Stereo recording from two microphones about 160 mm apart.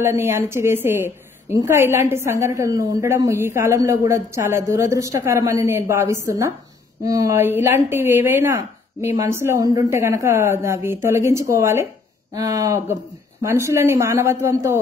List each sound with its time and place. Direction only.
0.0 s a woman's voice: 15° right (ahead or behind)